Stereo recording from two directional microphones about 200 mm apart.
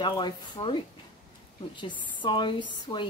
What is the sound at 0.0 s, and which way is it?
Speech, 25° left (ahead or behind).